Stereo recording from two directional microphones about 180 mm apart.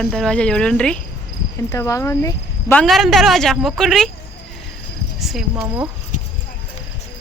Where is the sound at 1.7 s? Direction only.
20° left (ahead or behind).